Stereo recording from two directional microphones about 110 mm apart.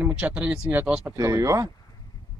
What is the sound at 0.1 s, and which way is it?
Speech, 10° right (ahead or behind).